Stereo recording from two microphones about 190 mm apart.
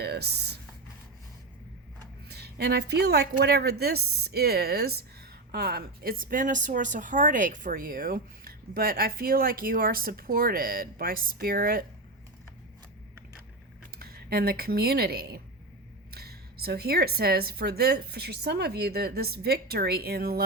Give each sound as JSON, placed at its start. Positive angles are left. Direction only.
{"t": 0.0, "sound": "writing", "side_deg": -60}
{"t": 2.3, "sound": "a woman's voice", "side_deg": -60}
{"t": 14.0, "sound": "speech", "side_deg": -55}